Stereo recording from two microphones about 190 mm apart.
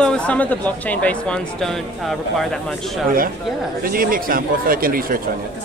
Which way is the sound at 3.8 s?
50° right (ahead or behind).